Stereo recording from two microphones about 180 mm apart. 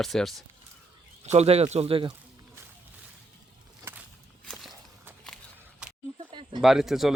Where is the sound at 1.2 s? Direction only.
35° right (ahead or behind).